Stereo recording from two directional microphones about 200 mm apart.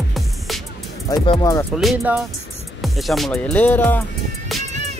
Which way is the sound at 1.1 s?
20° left (ahead or behind).